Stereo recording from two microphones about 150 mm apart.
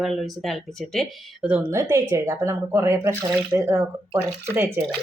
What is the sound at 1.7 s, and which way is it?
Speech, 20° right (ahead or behind).